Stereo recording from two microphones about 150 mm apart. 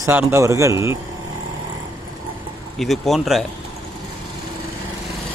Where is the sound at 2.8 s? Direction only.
Centre (ahead or behind).